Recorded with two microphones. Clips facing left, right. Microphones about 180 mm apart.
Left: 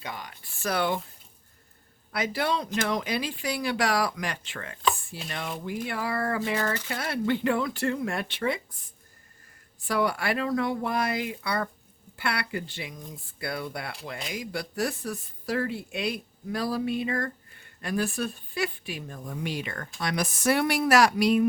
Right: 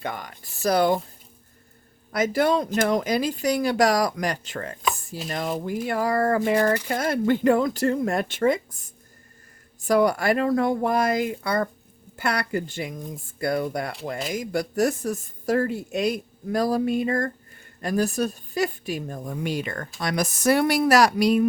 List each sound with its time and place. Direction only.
0.0 s speech: 50° right (ahead or behind)
2.1 s speech: 45° right (ahead or behind)
4.9 s chopping: 40° right (ahead or behind)
5.3 s speech: 40° right (ahead or behind)